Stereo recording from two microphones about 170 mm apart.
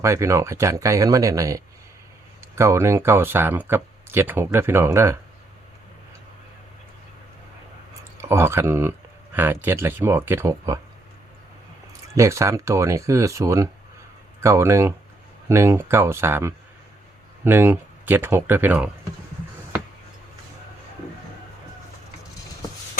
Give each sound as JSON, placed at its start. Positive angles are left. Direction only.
{"t": 0.0, "sound": "speech", "side_deg": -15}
{"t": 8.2, "sound": "speech", "side_deg": -15}
{"t": 12.1, "sound": "speech", "side_deg": -15}